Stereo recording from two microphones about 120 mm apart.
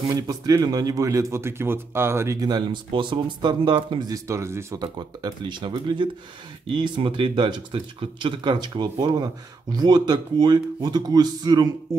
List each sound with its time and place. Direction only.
0.1 s speech: 30° right (ahead or behind)
2.4 s speech: 35° right (ahead or behind)
4.8 s speech: 40° right (ahead or behind)